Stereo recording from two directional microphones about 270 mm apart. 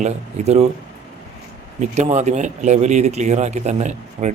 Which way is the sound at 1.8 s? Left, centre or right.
Right.